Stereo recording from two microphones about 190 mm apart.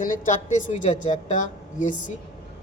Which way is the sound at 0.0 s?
40° left (ahead or behind).